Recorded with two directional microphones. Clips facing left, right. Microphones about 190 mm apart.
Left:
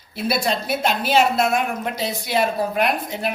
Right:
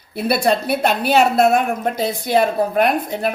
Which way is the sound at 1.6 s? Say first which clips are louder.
Right 5 dB; 50° right (ahead or behind).